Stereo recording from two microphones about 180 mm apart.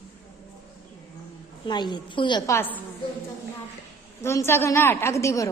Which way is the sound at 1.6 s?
25° left (ahead or behind).